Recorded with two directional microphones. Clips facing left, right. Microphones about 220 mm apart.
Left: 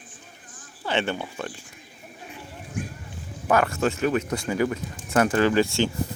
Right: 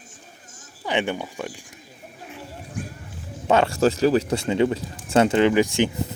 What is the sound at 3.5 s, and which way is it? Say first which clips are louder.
Speech: right 3 dB; 25° right (ahead or behind).